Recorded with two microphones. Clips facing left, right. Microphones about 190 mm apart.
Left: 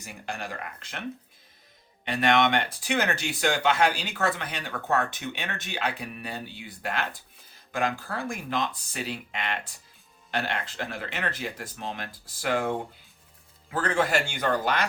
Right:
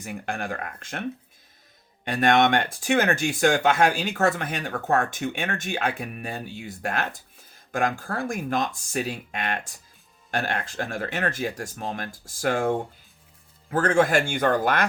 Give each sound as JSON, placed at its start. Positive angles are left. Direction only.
{"t": 0.0, "sound": "speech", "side_deg": -55}
{"t": 2.0, "sound": "speech", "side_deg": -45}